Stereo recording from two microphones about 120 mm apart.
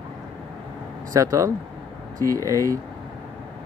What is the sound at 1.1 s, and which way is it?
Speech, 25° right (ahead or behind).